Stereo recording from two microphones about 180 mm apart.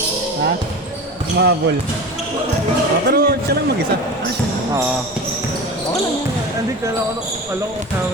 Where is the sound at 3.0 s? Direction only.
60° right (ahead or behind).